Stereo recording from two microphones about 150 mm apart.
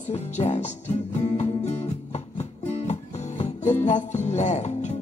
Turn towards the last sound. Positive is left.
turn(degrees=50)  # may be behind; listen again after turning